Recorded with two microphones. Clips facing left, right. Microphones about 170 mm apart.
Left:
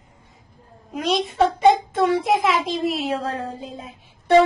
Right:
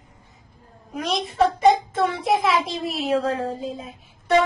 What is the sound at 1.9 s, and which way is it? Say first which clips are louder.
Speech: left 3 dB; 30° left (ahead or behind).